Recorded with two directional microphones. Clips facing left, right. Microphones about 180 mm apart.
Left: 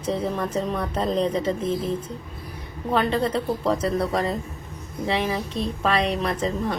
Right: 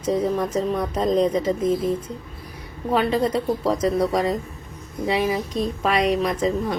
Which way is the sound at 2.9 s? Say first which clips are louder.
Right 2 dB; 10° right (ahead or behind).